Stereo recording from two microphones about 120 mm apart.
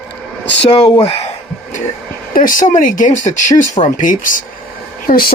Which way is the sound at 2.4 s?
90° left.